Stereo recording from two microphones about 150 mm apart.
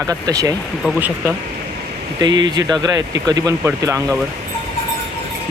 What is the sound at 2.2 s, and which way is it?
Speech, 30° right (ahead or behind).